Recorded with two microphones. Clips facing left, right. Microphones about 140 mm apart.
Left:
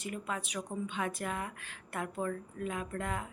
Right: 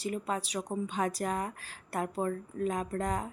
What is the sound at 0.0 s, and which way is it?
Speech, 35° right (ahead or behind).